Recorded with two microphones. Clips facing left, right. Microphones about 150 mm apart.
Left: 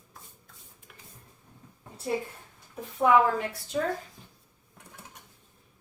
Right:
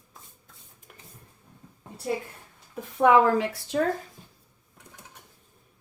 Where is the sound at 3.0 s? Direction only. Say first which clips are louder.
Right 3 dB; 80° right.